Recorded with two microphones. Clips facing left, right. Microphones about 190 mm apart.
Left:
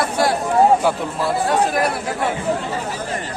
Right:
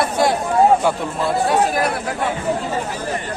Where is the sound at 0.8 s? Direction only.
5° left (ahead or behind).